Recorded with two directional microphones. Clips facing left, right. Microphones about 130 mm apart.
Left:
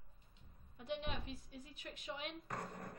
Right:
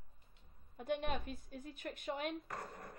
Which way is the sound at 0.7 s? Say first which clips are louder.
Right 5 dB; 50° right (ahead or behind).